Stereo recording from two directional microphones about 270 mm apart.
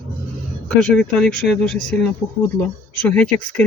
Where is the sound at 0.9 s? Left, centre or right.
Centre.